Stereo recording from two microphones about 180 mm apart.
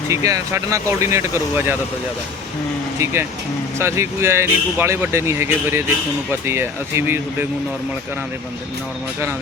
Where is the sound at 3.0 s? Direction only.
15° right (ahead or behind).